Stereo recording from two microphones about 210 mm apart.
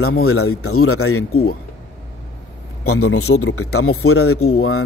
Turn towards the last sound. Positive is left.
turn(degrees=85)